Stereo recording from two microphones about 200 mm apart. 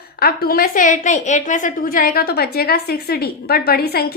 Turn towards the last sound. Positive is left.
turn(degrees=50)  # may be behind; listen again after turning